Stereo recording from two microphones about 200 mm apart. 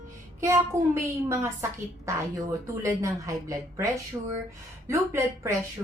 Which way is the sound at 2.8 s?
15° right (ahead or behind).